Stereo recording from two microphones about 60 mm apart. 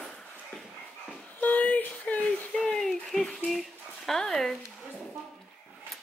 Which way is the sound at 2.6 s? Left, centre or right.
Centre.